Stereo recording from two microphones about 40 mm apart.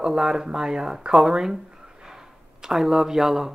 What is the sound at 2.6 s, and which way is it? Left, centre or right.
Speech, centre.